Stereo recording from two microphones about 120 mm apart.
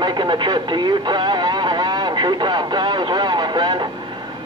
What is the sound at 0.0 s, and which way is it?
Radio, 40° right (ahead or behind).